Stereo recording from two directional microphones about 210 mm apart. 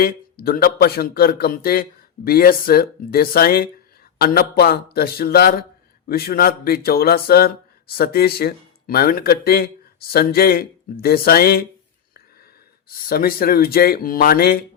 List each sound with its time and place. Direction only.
0.0 s speech: 45° left (ahead or behind)
12.9 s speech: 45° left (ahead or behind)